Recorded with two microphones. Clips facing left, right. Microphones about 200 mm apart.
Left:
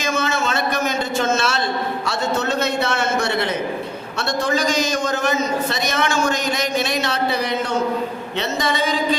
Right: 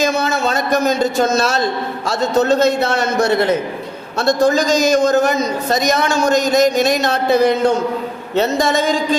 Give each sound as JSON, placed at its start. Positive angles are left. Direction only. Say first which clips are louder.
{"t": 0.0, "sound": "a man's voice", "louder": "right 5 dB", "side_deg": -35}